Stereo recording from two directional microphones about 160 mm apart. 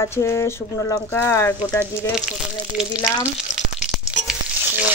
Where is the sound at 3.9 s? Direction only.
5° right (ahead or behind).